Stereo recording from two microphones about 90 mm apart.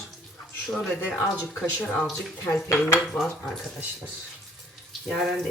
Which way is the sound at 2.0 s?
5° right (ahead or behind).